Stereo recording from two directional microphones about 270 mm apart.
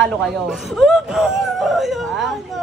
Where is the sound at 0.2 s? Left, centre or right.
Centre.